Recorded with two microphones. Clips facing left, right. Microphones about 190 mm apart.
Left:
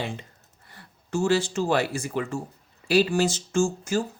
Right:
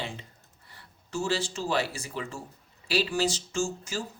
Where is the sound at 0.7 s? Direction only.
55° left (ahead or behind).